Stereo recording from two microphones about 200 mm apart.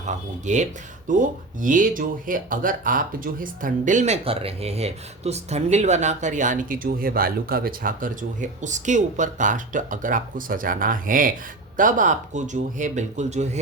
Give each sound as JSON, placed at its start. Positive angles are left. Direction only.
{"t": 0.0, "sound": "speech", "side_deg": -35}